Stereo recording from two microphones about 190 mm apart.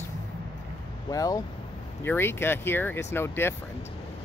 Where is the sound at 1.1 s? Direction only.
20° left (ahead or behind).